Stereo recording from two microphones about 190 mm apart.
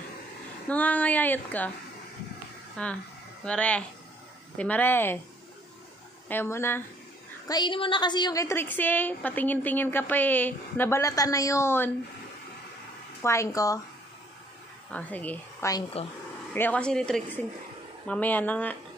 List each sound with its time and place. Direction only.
0.7 s a woman's voice: 5° left (ahead or behind)
2.8 s a woman's voice: 5° left (ahead or behind)
6.2 s a woman's voice: 10° left (ahead or behind)
13.2 s a woman's voice: 15° left (ahead or behind)
14.9 s speech: 10° left (ahead or behind)
16.0 s speech: 35° left (ahead or behind)
16.5 s a woman's voice: 10° left (ahead or behind)